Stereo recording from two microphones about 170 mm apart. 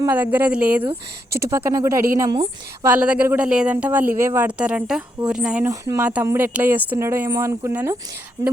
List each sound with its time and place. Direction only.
0.0 s speech: 10° right (ahead or behind)
1.5 s speech: 20° right (ahead or behind)
2.8 s speech: 10° right (ahead or behind)
5.6 s speech: 15° right (ahead or behind)